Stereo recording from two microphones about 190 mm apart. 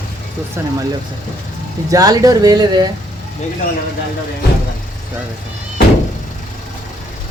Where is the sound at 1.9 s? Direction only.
20° right (ahead or behind).